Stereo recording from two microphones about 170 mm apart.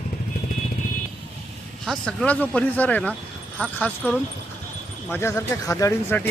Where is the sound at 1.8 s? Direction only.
5° left (ahead or behind).